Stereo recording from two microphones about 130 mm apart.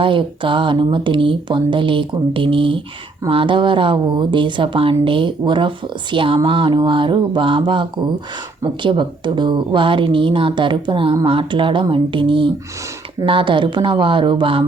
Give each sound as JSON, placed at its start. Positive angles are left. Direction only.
{"t": 0.0, "sound": "speech", "side_deg": -40}